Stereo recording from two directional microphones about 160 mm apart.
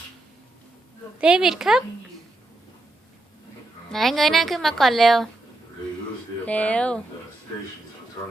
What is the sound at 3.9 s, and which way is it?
Speech, centre (ahead or behind).